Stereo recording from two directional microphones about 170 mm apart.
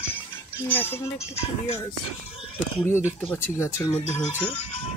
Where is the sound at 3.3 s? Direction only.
15° left (ahead or behind).